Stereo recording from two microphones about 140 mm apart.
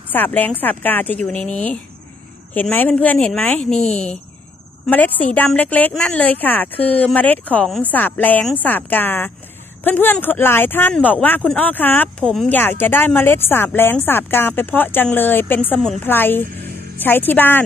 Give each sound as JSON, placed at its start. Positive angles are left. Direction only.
{"t": 0.1, "sound": "speech", "side_deg": 10}
{"t": 3.8, "sound": "speech", "side_deg": 50}
{"t": 4.8, "sound": "speech", "side_deg": 10}